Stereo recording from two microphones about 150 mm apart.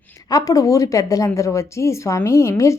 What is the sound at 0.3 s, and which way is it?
A woman's voice, 25° left (ahead or behind).